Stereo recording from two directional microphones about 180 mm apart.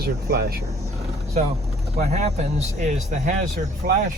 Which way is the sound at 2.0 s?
40° right (ahead or behind).